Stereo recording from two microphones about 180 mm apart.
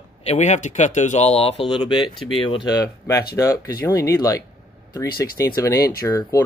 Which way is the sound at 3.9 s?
20° left (ahead or behind).